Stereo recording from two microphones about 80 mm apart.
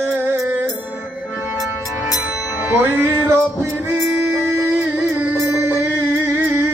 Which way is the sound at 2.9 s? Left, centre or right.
Right.